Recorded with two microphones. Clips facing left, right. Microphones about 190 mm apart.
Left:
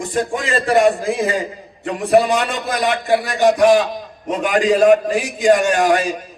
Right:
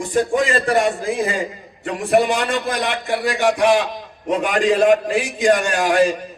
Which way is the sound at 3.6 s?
40° left (ahead or behind).